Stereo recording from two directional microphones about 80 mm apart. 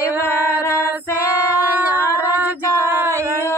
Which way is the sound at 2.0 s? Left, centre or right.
Left.